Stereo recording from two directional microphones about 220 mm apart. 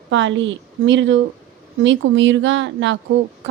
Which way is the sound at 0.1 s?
60° right (ahead or behind).